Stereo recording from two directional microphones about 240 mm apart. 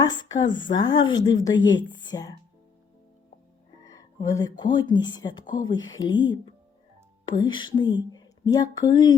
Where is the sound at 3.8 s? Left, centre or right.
Centre.